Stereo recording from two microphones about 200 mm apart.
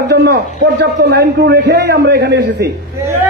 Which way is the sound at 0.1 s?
50° right (ahead or behind).